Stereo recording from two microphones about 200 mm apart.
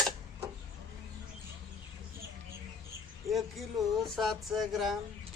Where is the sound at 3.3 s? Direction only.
Centre (ahead or behind).